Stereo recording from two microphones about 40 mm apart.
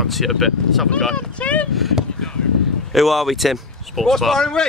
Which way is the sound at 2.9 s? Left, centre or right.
Centre.